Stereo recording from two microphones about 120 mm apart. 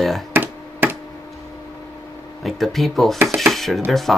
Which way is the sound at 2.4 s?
Centre (ahead or behind).